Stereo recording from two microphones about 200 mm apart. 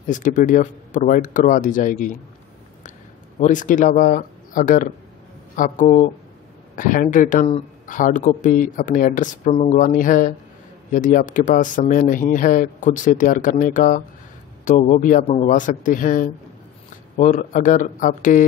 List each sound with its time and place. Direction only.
0.1 s speech: 40° left (ahead or behind)
3.3 s speech: 40° left (ahead or behind)